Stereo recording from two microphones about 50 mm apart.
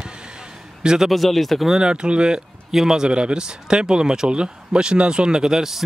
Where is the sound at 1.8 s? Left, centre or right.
Centre.